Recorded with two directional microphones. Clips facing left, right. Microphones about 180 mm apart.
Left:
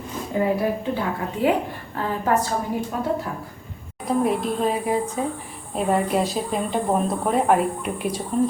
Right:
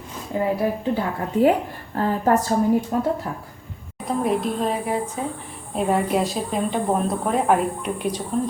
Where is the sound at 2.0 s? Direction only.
40° right (ahead or behind).